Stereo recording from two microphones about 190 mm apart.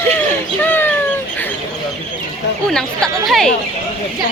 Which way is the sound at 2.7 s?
5° left (ahead or behind).